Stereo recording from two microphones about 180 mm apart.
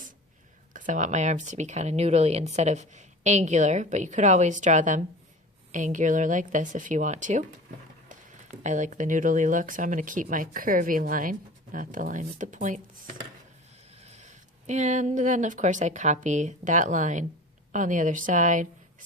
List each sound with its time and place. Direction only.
0.7 s speech: 45° right (ahead or behind)
14.0 s speech: 40° right (ahead or behind)